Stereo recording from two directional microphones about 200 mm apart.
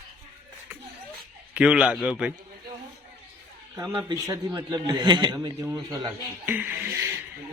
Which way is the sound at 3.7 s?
10° right (ahead or behind).